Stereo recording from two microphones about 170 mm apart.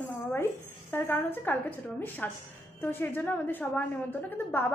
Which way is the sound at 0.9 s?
15° left (ahead or behind).